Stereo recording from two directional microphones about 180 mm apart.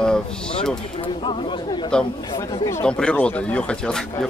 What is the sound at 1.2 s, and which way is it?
Speech, 30° left (ahead or behind).